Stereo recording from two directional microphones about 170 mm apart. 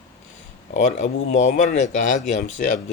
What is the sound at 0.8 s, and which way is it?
Speech, 45° left (ahead or behind).